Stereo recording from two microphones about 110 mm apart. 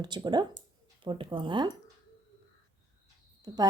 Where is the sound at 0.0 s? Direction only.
45° right (ahead or behind).